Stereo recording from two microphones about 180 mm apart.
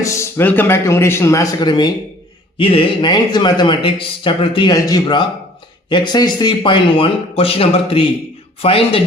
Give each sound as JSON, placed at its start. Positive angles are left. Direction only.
{"t": 0.0, "sound": "speech", "side_deg": 15}